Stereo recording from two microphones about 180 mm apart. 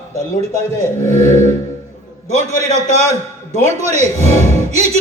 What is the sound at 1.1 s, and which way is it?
Speech, 40° right (ahead or behind).